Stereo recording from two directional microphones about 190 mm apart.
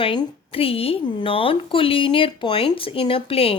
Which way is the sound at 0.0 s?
25° left (ahead or behind).